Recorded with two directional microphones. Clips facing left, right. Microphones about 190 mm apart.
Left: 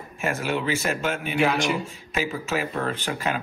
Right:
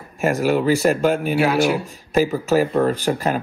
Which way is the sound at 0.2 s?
40° right (ahead or behind).